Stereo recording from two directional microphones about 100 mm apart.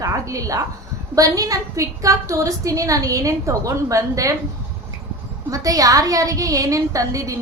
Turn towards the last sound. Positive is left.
turn(degrees=-35)  # may be behind; listen again after turning